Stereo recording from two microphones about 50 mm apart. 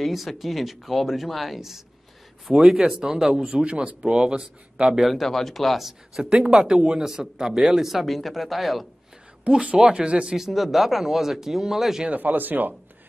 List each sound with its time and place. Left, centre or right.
0.0 s speech: centre
5.2 s speech: centre
6.2 s speech: centre
9.4 s speech: right
10.3 s speech: centre
12.1 s speech: right